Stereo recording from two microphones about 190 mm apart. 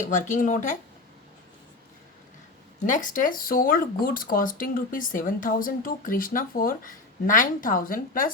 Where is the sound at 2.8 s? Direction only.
45° left (ahead or behind).